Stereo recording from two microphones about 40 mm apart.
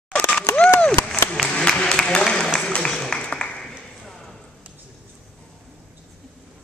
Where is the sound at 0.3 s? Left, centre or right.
Left.